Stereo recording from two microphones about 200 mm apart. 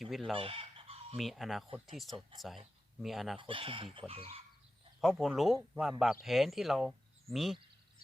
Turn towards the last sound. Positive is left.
turn(degrees=0)  # may be behind; listen again after turning